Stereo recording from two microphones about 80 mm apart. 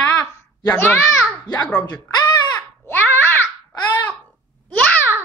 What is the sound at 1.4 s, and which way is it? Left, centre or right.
A child's voice, left.